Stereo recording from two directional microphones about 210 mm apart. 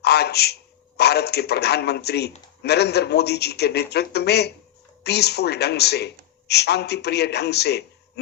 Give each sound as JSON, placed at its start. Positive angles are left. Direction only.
{"t": 0.0, "sound": "speech", "side_deg": 50}